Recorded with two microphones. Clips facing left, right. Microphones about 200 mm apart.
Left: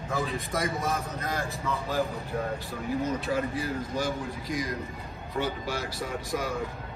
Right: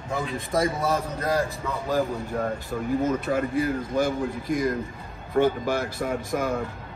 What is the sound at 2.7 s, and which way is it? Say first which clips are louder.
A man's voice: right 7 dB; 50° right (ahead or behind).